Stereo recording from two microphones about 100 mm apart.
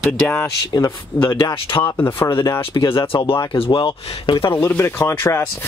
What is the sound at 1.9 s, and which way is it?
Speech, 20° left (ahead or behind).